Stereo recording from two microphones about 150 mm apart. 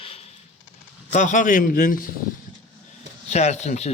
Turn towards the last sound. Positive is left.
turn(degrees=50)  # may be behind; listen again after turning